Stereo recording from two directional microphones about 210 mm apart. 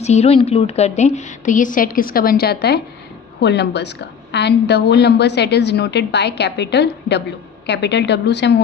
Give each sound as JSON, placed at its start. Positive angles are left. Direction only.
{"t": 0.0, "sound": "a woman's voice", "side_deg": 30}